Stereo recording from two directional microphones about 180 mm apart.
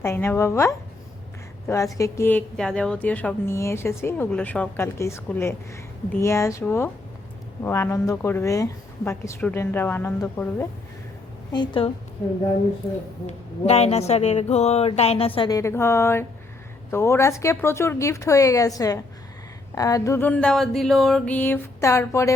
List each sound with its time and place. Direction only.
0.0 s a woman's voice: 10° left (ahead or behind)
11.5 s a woman's voice: 25° left (ahead or behind)
13.2 s a sound: 35° left (ahead or behind)
15.4 s a woman's voice: 20° left (ahead or behind)